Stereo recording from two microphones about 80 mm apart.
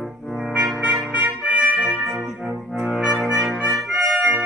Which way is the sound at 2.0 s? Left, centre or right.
Centre.